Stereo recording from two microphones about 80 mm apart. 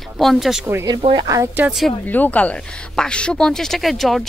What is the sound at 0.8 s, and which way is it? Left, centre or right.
Speech, right.